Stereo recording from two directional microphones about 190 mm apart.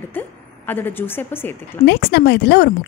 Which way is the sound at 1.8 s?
60° left (ahead or behind).